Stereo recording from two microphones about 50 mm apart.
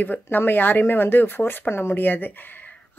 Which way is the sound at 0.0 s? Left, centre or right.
Left.